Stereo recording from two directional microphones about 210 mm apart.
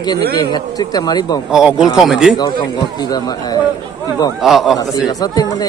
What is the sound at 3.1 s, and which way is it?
Speech, 20° left (ahead or behind).